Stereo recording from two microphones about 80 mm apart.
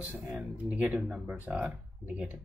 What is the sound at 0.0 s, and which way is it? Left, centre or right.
Speech, centre.